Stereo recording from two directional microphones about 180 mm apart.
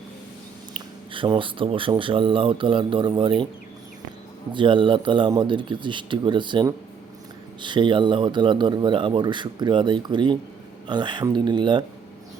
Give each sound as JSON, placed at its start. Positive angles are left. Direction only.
{"t": 1.1, "sound": "speech", "side_deg": -30}
{"t": 4.5, "sound": "speech", "side_deg": -25}